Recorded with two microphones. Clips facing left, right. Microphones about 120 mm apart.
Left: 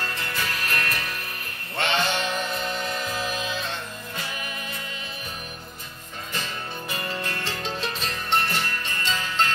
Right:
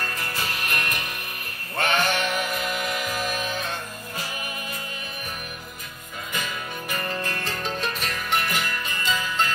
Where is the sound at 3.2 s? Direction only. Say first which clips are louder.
Right 1 dB; 50° right (ahead or behind).